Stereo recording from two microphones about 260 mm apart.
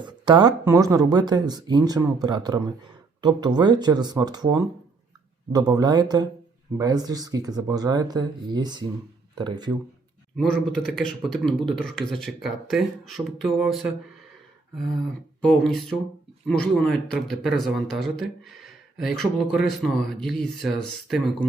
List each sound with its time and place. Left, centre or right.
0.0 s speech: centre
10.3 s speech: centre
15.4 s speech: centre